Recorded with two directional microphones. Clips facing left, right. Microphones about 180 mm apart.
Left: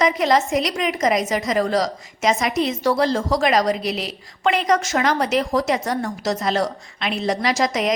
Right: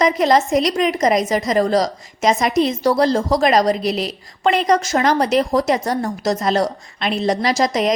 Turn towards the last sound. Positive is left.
turn(degrees=-35)  # may be behind; listen again after turning